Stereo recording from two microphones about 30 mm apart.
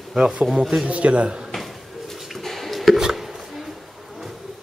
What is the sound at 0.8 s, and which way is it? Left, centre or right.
Speech, right.